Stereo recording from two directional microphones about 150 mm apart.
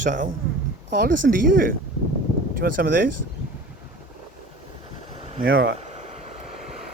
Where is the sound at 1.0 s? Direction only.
70° right (ahead or behind).